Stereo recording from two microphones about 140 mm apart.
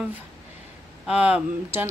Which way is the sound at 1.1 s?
10° right (ahead or behind).